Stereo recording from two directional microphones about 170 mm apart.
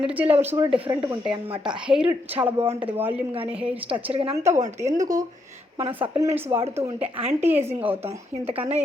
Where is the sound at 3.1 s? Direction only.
35° right (ahead or behind).